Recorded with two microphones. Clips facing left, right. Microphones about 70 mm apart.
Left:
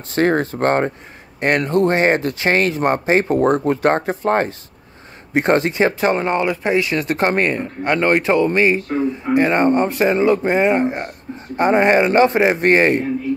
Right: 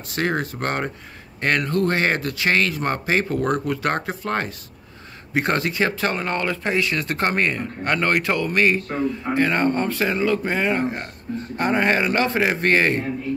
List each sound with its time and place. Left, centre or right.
0.1 s speech: left